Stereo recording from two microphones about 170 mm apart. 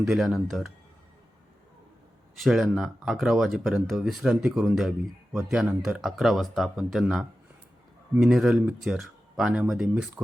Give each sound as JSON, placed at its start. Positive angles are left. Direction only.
{"t": 0.0, "sound": "speech", "side_deg": 0}
{"t": 2.4, "sound": "speech", "side_deg": 0}